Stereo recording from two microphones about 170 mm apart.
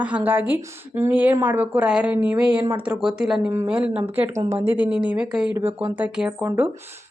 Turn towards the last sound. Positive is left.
turn(degrees=-10)  # may be behind; listen again after turning